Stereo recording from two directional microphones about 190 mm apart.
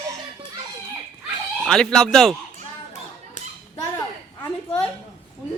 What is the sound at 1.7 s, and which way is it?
Speech, 5° left (ahead or behind).